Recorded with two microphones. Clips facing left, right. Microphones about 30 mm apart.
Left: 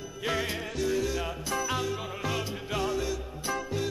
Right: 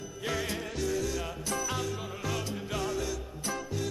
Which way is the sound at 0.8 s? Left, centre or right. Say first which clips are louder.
Left 3 dB; centre.